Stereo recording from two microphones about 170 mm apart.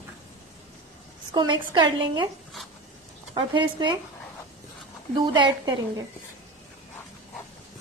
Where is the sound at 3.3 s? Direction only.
30° right (ahead or behind).